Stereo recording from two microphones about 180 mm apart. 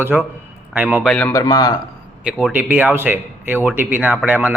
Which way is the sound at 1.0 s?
10° left (ahead or behind).